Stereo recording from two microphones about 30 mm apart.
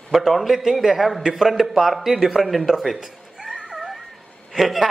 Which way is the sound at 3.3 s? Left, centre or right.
Right.